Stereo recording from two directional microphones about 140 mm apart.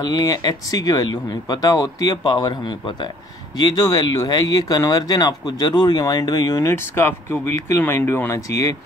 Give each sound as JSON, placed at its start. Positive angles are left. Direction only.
{"t": 0.0, "sound": "speech", "side_deg": 25}